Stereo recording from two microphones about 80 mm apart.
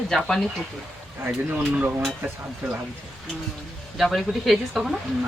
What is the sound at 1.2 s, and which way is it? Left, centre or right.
Speech, centre.